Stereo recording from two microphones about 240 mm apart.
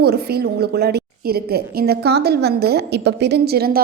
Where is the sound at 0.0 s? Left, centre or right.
Right.